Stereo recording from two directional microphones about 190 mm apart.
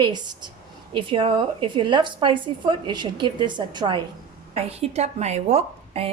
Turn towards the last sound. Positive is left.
turn(degrees=-35)  # may be behind; listen again after turning